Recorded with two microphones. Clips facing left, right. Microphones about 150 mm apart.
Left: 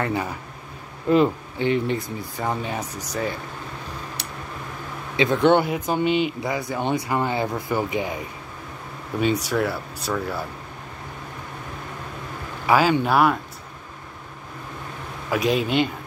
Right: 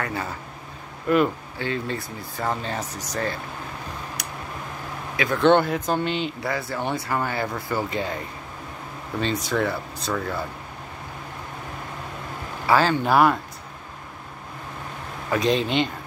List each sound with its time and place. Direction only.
0.0 s speech: 20° left (ahead or behind)
5.1 s speech: 25° left (ahead or behind)
5.4 s speech: 10° left (ahead or behind)
9.2 s speech: 10° left (ahead or behind)
12.6 s speech: 15° left (ahead or behind)
13.0 s speech: centre (ahead or behind)
15.3 s speech: 10° left (ahead or behind)